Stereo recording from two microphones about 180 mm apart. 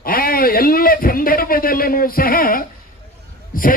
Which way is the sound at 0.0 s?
55° left (ahead or behind).